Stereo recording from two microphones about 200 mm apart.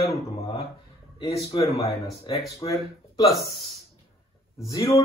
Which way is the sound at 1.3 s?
25° left (ahead or behind).